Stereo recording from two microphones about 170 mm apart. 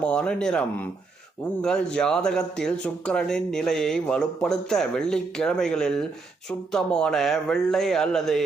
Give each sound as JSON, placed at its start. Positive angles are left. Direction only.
{"t": 0.0, "sound": "speech", "side_deg": 5}
{"t": 1.6, "sound": "speech", "side_deg": 5}